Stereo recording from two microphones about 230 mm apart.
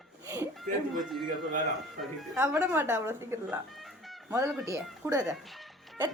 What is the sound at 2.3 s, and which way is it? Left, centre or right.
A woman's voice, centre.